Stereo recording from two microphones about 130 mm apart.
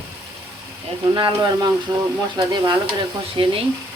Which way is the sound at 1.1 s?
35° right (ahead or behind).